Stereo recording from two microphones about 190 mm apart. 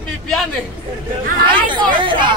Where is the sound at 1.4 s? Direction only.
25° right (ahead or behind).